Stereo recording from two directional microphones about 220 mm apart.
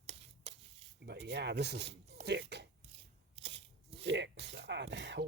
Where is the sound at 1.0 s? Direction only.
50° right (ahead or behind).